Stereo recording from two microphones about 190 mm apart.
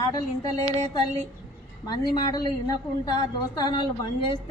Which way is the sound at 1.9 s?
20° left (ahead or behind).